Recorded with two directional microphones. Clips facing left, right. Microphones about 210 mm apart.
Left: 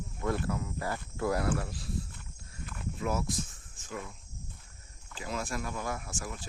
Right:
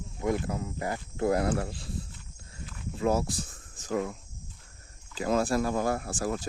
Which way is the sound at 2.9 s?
30° right (ahead or behind).